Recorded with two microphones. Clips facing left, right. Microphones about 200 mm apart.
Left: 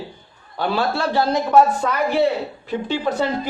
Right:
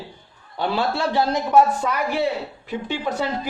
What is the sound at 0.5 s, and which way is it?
A man's voice, 20° right (ahead or behind).